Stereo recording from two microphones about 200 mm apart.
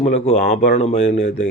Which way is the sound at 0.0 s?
35° left (ahead or behind).